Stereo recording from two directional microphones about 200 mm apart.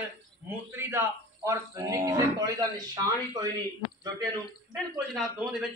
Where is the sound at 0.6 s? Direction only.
10° right (ahead or behind).